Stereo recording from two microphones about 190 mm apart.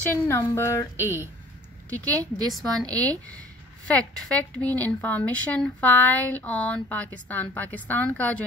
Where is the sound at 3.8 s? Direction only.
5° left (ahead or behind).